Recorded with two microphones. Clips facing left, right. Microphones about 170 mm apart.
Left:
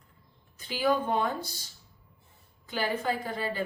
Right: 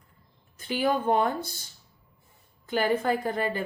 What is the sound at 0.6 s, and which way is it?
Speech, 50° right (ahead or behind).